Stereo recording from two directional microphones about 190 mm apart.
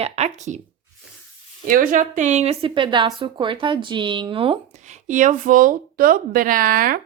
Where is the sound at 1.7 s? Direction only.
45° right (ahead or behind); by 4.6 s 30° right (ahead or behind).